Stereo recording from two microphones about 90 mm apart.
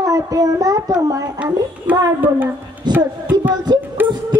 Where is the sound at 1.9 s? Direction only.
15° right (ahead or behind).